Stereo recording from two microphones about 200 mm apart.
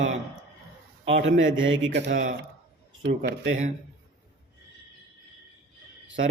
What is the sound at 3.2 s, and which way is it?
Speech, 55° right (ahead or behind).